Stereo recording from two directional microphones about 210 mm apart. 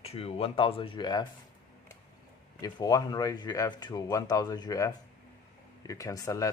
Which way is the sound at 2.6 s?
20° left (ahead or behind).